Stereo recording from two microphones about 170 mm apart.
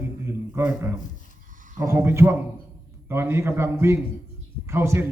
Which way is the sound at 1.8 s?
15° right (ahead or behind).